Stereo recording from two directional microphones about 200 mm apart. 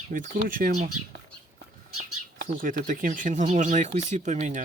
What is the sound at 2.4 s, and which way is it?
Speech, 45° right (ahead or behind).